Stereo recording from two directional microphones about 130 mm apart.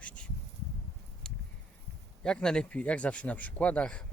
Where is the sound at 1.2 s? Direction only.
5° left (ahead or behind).